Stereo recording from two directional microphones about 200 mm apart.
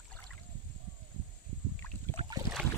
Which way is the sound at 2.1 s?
20° right (ahead or behind).